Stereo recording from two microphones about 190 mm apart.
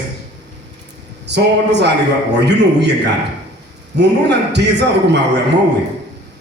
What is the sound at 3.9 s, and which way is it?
Speech, 65° right (ahead or behind).